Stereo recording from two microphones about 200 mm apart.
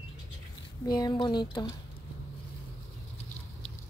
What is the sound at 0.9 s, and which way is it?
Speech, 20° left (ahead or behind).